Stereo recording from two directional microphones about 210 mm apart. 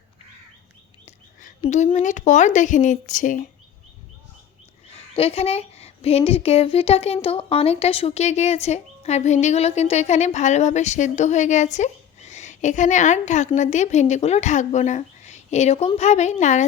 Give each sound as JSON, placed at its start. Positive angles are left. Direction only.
{"t": 1.0, "sound": "a sound", "side_deg": 40}
{"t": 1.6, "sound": "a woman's voice", "side_deg": 30}
{"t": 5.1, "sound": "a woman's voice", "side_deg": 30}